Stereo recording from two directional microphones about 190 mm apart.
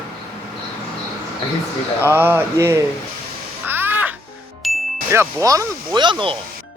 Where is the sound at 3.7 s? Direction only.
10° right (ahead or behind).